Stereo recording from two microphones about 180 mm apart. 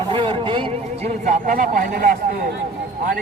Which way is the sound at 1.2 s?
50° right (ahead or behind).